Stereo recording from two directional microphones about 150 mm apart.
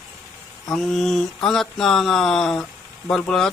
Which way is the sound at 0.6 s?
5° left (ahead or behind).